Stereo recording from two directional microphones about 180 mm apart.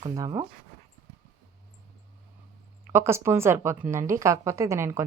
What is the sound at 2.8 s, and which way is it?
A woman's voice, 15° right (ahead or behind).